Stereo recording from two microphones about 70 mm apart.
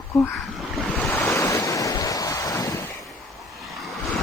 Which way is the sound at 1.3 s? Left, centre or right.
Left.